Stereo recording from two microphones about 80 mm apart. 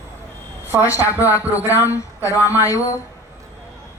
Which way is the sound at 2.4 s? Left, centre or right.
Right.